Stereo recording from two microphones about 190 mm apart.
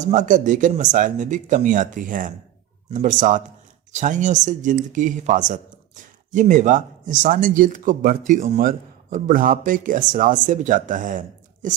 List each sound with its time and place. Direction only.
0.0 s speech: 40° right (ahead or behind)